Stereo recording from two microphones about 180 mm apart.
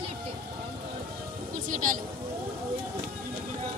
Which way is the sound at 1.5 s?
45° right (ahead or behind).